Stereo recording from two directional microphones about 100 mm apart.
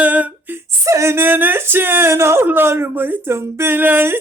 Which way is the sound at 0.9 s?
30° right (ahead or behind).